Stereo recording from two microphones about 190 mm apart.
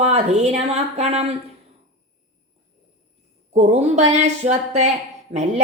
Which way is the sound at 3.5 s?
35° right (ahead or behind).